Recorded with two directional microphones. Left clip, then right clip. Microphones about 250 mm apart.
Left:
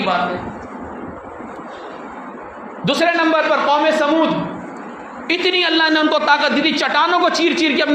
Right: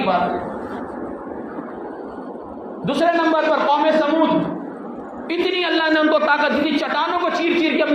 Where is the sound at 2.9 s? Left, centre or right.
Left.